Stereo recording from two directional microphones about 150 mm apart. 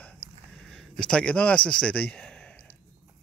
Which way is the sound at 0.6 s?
5° left (ahead or behind).